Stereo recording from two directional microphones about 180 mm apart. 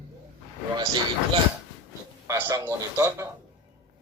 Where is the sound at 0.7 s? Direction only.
20° right (ahead or behind).